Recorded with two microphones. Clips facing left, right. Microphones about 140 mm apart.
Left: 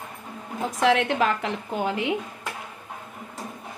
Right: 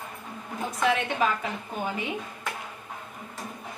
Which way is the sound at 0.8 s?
85° left.